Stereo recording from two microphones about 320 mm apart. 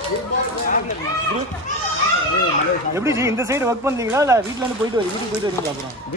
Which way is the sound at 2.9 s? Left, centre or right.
Centre.